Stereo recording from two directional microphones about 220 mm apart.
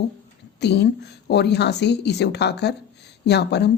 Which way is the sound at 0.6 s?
50° left (ahead or behind).